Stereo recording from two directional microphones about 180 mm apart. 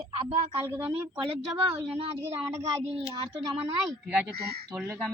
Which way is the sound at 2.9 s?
30° right (ahead or behind).